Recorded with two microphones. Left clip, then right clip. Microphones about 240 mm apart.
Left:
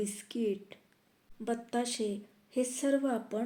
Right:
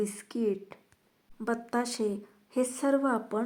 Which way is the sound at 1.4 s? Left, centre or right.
Centre.